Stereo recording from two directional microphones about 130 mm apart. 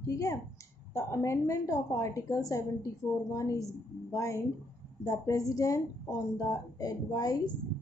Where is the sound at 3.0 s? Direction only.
15° left (ahead or behind).